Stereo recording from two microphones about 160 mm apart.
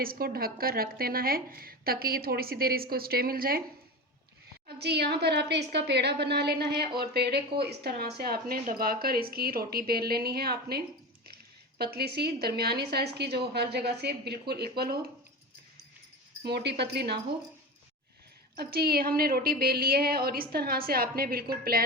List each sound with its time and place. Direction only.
0.0 s a woman's voice: 65° right (ahead or behind)
4.8 s a woman's voice: 90° right
8.2 s a woman's voice: 70° right (ahead or behind)
16.4 s a woman's voice: 90° right
18.5 s a woman's voice: 80° right